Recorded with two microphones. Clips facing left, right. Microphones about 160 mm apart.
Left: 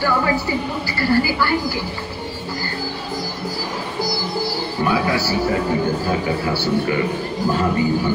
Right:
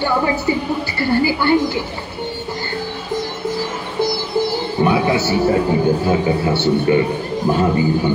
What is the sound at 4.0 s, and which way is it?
Music, 20° right (ahead or behind).